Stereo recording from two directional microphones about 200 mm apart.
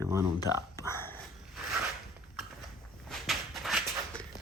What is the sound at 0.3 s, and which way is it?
Speech, 15° left (ahead or behind).